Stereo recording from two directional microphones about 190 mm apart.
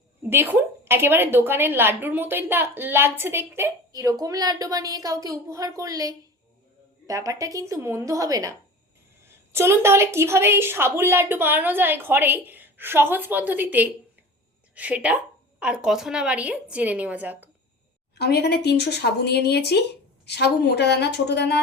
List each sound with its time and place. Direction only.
0.2 s a woman's voice: 10° right (ahead or behind)
18.1 s speech: 60° left (ahead or behind)